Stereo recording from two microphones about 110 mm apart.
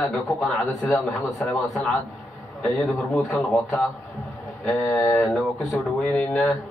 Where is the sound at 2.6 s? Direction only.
Centre (ahead or behind).